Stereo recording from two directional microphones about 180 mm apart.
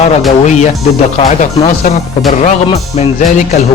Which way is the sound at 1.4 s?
40° left (ahead or behind).